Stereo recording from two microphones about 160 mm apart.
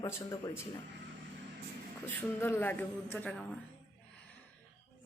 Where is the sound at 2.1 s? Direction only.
10° left (ahead or behind).